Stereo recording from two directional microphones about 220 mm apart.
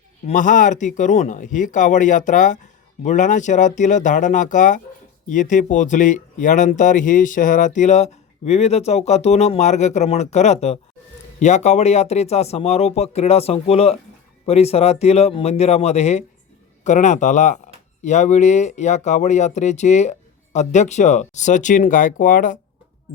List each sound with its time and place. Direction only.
0.3 s speech: 35° left (ahead or behind)